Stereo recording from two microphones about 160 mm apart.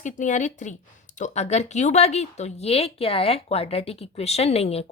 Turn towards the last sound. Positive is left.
turn(degrees=40)  # may be behind; listen again after turning